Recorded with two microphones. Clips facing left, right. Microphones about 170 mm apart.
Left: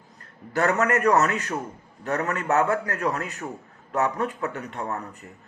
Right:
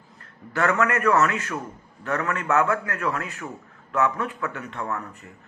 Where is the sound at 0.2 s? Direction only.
40° left (ahead or behind).